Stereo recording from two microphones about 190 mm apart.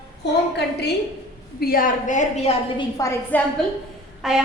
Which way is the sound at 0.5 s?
60° left (ahead or behind).